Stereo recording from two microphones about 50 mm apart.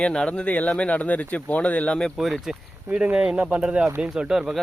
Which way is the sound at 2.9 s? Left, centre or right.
Right.